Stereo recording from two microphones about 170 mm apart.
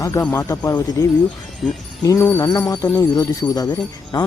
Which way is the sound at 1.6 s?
Centre (ahead or behind).